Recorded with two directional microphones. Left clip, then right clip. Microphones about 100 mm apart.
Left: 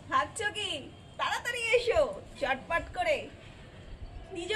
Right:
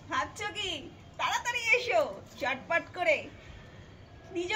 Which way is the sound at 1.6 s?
30° left (ahead or behind).